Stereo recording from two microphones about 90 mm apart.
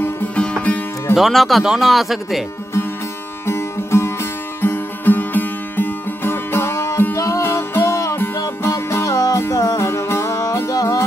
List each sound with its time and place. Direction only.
0.4 s music: 10° left (ahead or behind)
1.1 s speech: centre (ahead or behind)
3.4 s music: 30° left (ahead or behind)